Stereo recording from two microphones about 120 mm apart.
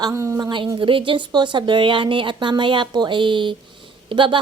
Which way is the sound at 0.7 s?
45° right (ahead or behind).